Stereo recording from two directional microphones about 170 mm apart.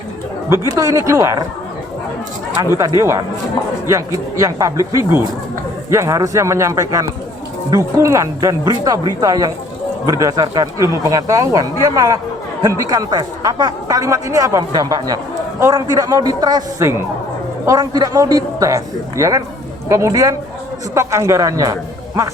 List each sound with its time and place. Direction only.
0.5 s a man's voice: 20° right (ahead or behind)
3.0 s a man's voice: 20° right (ahead or behind)